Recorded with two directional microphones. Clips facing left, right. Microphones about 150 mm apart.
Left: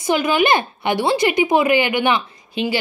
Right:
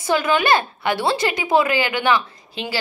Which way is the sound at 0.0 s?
15° left (ahead or behind).